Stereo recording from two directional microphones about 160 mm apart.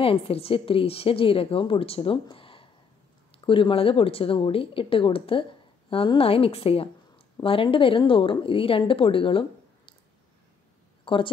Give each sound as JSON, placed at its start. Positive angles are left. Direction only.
{"t": 0.0, "sound": "a woman's voice", "side_deg": 35}
{"t": 11.1, "sound": "speech", "side_deg": 30}